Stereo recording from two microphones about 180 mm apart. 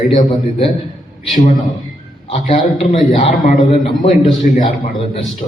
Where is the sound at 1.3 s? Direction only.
45° left (ahead or behind).